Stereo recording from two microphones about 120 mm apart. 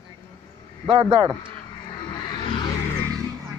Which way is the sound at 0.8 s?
35° right (ahead or behind).